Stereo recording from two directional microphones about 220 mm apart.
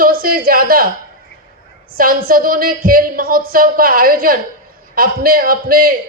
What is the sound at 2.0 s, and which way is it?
Speech, 40° right (ahead or behind).